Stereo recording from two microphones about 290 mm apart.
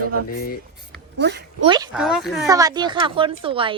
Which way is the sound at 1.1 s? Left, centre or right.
Right.